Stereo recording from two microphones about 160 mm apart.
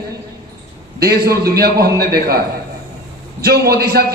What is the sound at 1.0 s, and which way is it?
A man's voice, 70° right (ahead or behind).